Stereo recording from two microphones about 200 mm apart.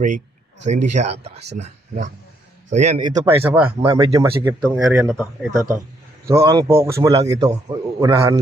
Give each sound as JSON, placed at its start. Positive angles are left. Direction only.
{"t": 0.7, "sound": "speech", "side_deg": -35}
{"t": 3.2, "sound": "speech", "side_deg": -15}
{"t": 4.7, "sound": "a man's voice", "side_deg": -10}